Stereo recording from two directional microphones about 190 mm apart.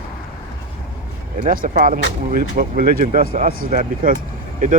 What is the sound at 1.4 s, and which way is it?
Speech, 45° right (ahead or behind).